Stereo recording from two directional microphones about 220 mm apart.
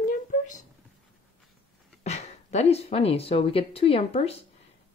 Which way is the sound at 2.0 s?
30° left (ahead or behind).